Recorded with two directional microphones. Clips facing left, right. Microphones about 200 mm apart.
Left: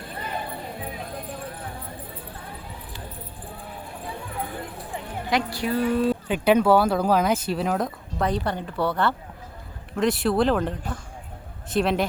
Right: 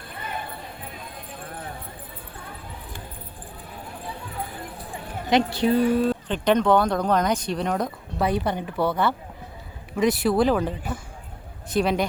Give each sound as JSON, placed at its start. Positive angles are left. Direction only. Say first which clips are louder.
{"t": 5.3, "sound": "speech", "louder": "right 5 dB", "side_deg": -25}
{"t": 6.1, "sound": "speech", "louder": "left 1 dB", "side_deg": 10}
{"t": 8.4, "sound": "speech", "louder": "right 1 dB", "side_deg": -15}
{"t": 9.9, "sound": "speech", "louder": "right 1 dB", "side_deg": 0}